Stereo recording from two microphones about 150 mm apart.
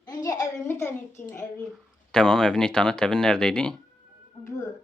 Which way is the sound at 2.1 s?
5° left (ahead or behind).